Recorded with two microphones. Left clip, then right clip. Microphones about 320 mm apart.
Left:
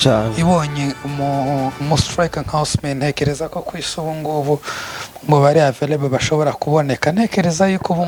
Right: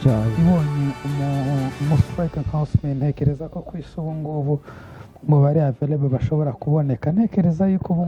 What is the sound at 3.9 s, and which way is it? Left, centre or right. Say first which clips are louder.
Speech: left 7 dB; left.